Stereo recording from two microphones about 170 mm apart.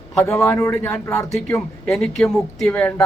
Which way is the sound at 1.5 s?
5° left (ahead or behind).